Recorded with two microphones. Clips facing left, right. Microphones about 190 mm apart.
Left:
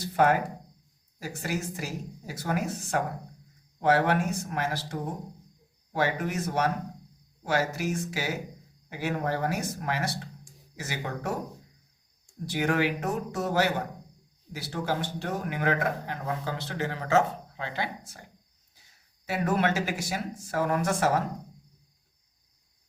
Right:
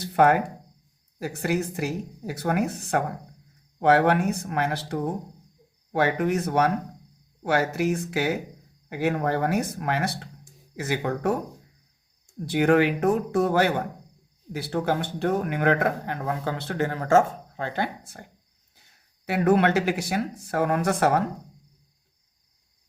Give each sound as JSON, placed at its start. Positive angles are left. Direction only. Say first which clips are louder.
{"t": 0.0, "sound": "speech", "louder": "right 4 dB", "side_deg": -60}
{"t": 12.5, "sound": "speech", "louder": "right 7 dB", "side_deg": -55}